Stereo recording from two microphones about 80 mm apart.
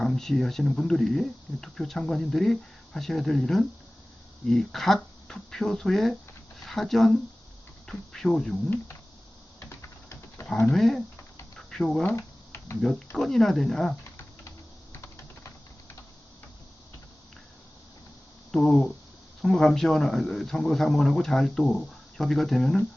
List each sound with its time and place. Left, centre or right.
0.0 s speech: centre
9.6 s typing: left
10.7 s speech: centre
11.5 s a sound: centre
12.1 s a sound: left
13.1 s speech: centre
18.5 s speech: centre